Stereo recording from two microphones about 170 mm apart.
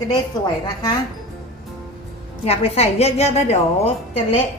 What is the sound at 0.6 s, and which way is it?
Speech, 25° left (ahead or behind).